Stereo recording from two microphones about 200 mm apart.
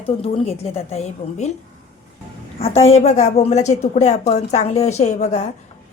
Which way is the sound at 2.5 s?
30° left (ahead or behind).